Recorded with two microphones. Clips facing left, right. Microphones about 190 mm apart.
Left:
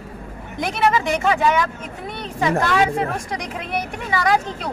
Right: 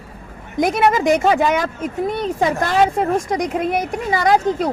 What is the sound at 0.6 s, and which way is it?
Speech, 45° right (ahead or behind).